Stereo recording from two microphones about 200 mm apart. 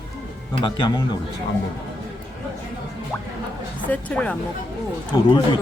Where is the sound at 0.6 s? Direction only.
20° left (ahead or behind).